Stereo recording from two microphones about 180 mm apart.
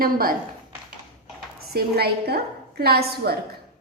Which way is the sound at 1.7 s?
60° right (ahead or behind).